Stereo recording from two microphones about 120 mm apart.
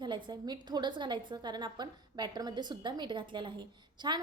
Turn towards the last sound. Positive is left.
turn(degrees=-40)  # may be behind; listen again after turning